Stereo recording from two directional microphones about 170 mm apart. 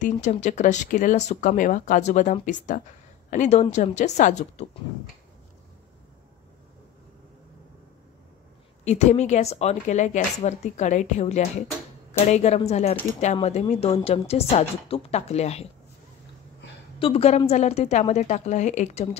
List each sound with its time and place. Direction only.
0.0 s a woman's voice: 45° left (ahead or behind)
8.8 s a woman's voice: 40° left (ahead or behind)
17.0 s a woman's voice: 35° left (ahead or behind)